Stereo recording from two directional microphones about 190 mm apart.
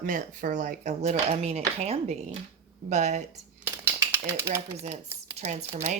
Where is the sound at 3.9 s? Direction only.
15° right (ahead or behind).